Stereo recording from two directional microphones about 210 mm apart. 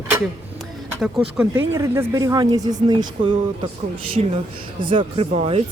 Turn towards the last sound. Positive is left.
turn(degrees=-30)  # may be behind; listen again after turning